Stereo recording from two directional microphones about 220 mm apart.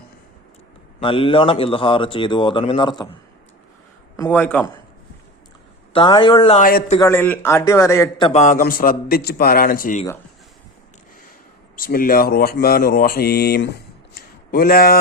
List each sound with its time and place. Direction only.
0.9 s speech: 25° left (ahead or behind)
4.2 s a man's voice: 10° left (ahead or behind)
5.9 s speech: 20° left (ahead or behind)
6.6 s a man's voice: 40° left (ahead or behind)
7.1 s a man's voice: 10° left (ahead or behind)
8.3 s a man's voice: 30° left (ahead or behind)
11.8 s speech: 40° left (ahead or behind)